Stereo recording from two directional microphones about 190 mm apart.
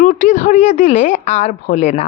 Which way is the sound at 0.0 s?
40° left (ahead or behind).